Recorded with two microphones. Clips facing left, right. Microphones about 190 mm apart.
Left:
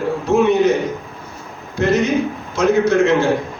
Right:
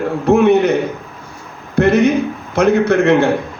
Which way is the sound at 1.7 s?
60° right (ahead or behind).